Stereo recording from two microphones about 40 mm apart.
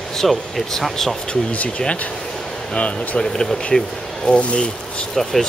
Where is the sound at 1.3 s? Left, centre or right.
Left.